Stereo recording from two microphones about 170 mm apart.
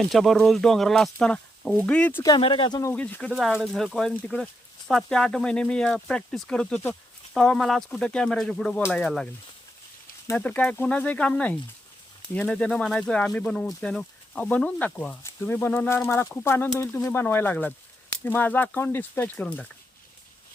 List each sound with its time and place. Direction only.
0.0 s speech: centre (ahead or behind)
2.2 s speech: 25° left (ahead or behind)
2.9 s speech: 5° left (ahead or behind)